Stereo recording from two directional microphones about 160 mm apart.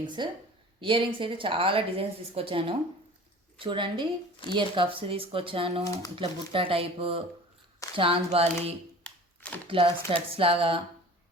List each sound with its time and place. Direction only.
0.0 s a woman's voice: 30° right (ahead or behind)
9.0 s a sound: 10° left (ahead or behind)
9.6 s a woman's voice: 35° right (ahead or behind)